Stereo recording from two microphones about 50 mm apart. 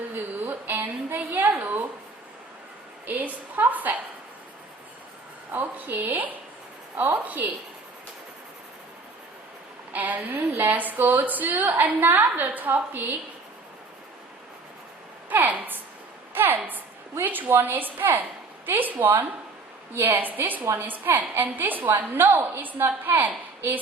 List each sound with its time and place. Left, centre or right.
0.1 s a sound: right
3.1 s a woman's voice: right
5.5 s a woman's voice: right
9.9 s a woman's voice: right
15.3 s a sound: right
17.2 s a woman's voice: right